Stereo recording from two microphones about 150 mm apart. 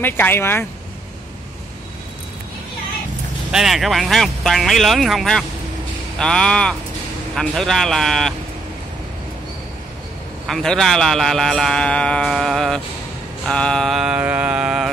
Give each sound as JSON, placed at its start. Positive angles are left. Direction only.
{"t": 0.0, "sound": "speech", "side_deg": 15}
{"t": 3.5, "sound": "a man's voice", "side_deg": 0}
{"t": 10.4, "sound": "a man's voice", "side_deg": 0}